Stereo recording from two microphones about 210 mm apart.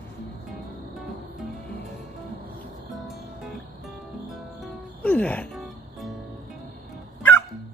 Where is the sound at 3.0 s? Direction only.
Centre (ahead or behind).